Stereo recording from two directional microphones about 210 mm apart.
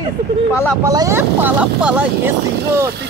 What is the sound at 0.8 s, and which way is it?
Speech, 15° right (ahead or behind).